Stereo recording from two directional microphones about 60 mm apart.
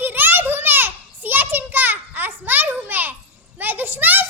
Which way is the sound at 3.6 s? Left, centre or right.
Right.